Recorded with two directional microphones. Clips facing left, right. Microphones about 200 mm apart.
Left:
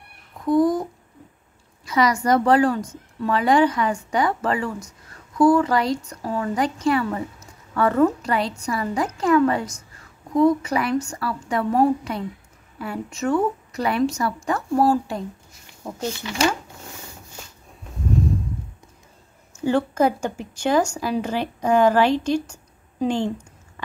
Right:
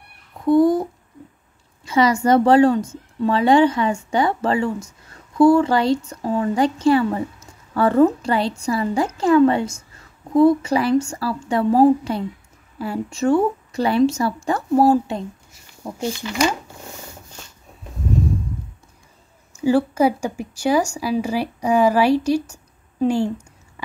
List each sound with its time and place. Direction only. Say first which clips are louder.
0.5 s a woman's voice: right 4 dB; 30° right (ahead or behind)
1.9 s a woman's voice: right 3 dB; 25° right (ahead or behind)
15.8 s speech: right 3 dB; 15° right (ahead or behind)
19.5 s speech: right 4 dB; 10° right (ahead or behind)